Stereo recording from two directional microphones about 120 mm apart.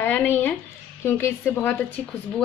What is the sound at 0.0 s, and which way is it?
A woman's voice, 15° left (ahead or behind).